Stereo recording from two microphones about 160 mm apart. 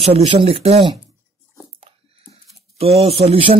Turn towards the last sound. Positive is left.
turn(degrees=-35)  # may be behind; listen again after turning